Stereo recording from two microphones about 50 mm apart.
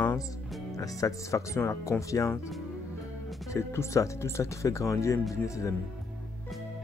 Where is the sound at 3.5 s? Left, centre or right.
Left.